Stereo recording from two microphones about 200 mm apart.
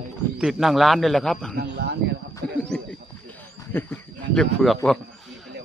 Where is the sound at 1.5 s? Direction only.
55° right (ahead or behind).